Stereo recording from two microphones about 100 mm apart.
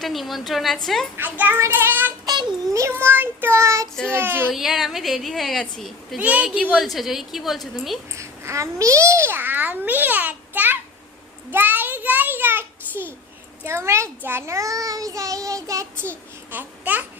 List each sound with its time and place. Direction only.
0.0 s a woman's voice: centre (ahead or behind)
1.1 s a child's voice: 20° right (ahead or behind)
2.2 s child singing: 45° right (ahead or behind)
2.7 s a child's voice: 25° right (ahead or behind)
4.5 s a woman's voice: centre (ahead or behind)
6.1 s a woman's voice: 10° right (ahead or behind)
8.1 s a child's voice: 30° right (ahead or behind)
11.5 s child singing: 20° right (ahead or behind)
13.7 s a child's voice: 25° right (ahead or behind)
16.5 s speech: 20° right (ahead or behind)